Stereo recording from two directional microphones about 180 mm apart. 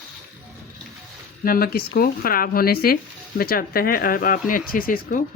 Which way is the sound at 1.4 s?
55° left (ahead or behind).